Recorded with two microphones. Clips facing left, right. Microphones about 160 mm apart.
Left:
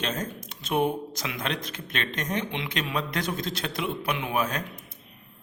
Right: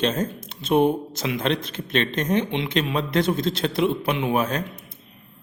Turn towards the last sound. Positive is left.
turn(degrees=-30)  # may be behind; listen again after turning